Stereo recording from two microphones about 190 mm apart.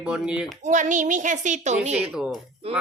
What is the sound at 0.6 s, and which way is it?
Speech, 40° right (ahead or behind).